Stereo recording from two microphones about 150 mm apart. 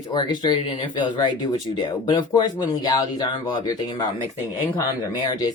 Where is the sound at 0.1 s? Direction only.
30° left (ahead or behind).